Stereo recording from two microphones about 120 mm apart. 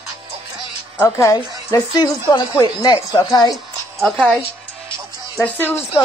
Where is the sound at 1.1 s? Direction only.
30° left (ahead or behind).